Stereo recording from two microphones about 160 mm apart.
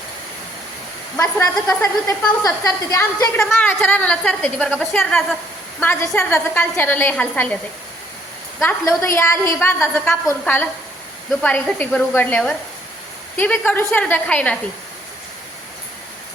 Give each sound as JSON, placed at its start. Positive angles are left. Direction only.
{"t": 1.1, "sound": "a woman's voice", "side_deg": 10}
{"t": 3.5, "sound": "a woman's voice", "side_deg": 5}
{"t": 8.6, "sound": "a woman's voice", "side_deg": 15}